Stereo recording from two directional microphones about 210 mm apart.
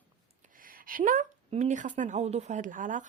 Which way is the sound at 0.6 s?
40° right (ahead or behind).